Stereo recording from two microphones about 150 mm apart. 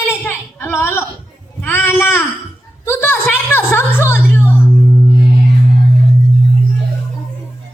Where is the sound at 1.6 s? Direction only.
15° left (ahead or behind).